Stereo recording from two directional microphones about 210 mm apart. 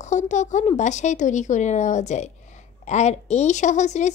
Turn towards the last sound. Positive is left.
turn(degrees=35)  # may be behind; listen again after turning